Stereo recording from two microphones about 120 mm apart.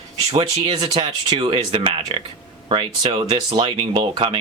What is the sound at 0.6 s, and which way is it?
Speech, 40° right (ahead or behind).